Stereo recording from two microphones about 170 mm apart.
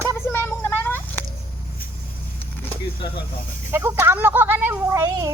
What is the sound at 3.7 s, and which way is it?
Speech, 15° right (ahead or behind).